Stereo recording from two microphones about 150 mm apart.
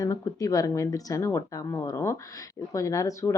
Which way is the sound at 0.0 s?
25° left (ahead or behind).